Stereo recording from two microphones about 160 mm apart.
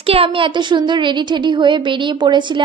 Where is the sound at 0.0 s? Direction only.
35° right (ahead or behind).